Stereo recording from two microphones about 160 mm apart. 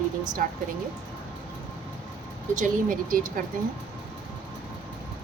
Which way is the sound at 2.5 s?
55° right (ahead or behind).